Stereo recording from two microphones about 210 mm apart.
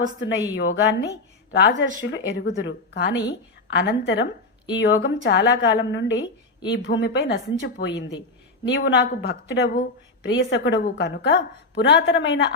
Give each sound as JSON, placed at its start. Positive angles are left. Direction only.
{"t": 0.5, "sound": "a woman's voice", "side_deg": 60}